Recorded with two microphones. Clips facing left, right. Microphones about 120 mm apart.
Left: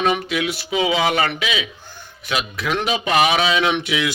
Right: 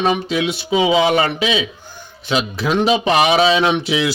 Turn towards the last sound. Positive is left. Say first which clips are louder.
# right 3 dB
turn(degrees=-30)  # may be behind; listen again after turning